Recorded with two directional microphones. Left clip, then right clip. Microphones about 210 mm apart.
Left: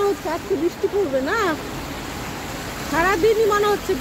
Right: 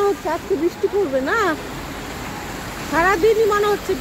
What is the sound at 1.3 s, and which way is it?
Speech, 20° right (ahead or behind).